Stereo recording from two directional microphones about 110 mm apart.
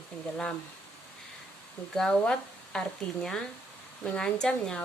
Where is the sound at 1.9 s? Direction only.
5° left (ahead or behind).